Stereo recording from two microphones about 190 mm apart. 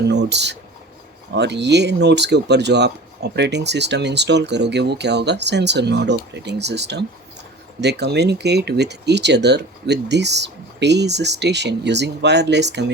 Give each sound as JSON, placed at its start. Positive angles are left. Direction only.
{"t": 0.0, "sound": "speech", "side_deg": -65}